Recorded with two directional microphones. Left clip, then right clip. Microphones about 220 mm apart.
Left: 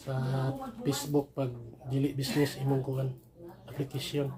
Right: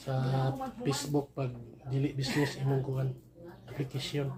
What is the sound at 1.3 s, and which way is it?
Speech, 30° left (ahead or behind).